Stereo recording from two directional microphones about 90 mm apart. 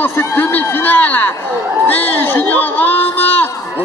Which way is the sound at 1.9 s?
20° left (ahead or behind).